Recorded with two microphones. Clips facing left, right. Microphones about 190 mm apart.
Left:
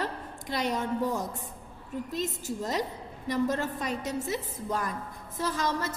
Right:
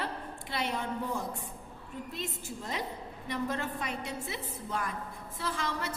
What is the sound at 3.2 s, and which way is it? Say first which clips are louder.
A woman's voice: left 6 dB; 40° left (ahead or behind).